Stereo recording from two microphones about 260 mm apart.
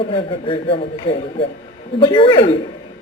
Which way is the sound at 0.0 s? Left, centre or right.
Centre.